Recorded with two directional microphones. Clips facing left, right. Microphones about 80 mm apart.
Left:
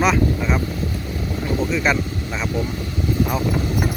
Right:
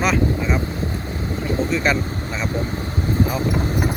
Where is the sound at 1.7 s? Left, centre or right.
Centre.